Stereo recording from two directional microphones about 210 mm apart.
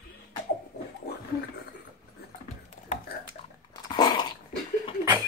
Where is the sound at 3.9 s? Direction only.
20° left (ahead or behind).